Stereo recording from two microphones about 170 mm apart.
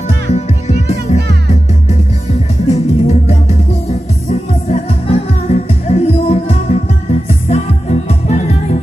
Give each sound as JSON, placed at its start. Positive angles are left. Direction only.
{"t": 0.3, "sound": "music", "side_deg": 40}